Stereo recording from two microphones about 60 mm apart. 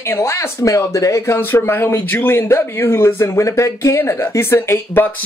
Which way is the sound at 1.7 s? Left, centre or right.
Left.